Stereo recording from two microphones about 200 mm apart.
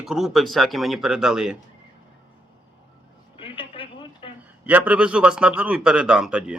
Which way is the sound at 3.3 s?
25° left (ahead or behind).